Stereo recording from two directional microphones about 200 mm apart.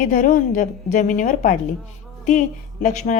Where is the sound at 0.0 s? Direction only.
45° left (ahead or behind).